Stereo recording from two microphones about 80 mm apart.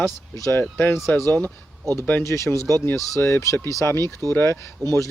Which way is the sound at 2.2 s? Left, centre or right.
Left.